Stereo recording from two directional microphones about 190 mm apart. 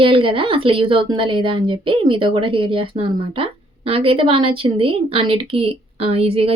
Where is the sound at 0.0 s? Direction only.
25° right (ahead or behind).